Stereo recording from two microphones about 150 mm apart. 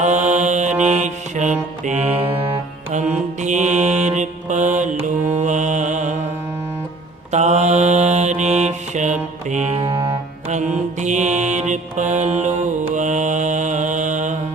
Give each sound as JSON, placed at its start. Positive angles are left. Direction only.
{"t": 0.0, "sound": "music", "side_deg": -50}
{"t": 1.8, "sound": "mantra", "side_deg": -50}
{"t": 7.3, "sound": "mantra", "side_deg": -50}
{"t": 9.5, "sound": "music", "side_deg": -45}
{"t": 10.6, "sound": "mantra", "side_deg": -50}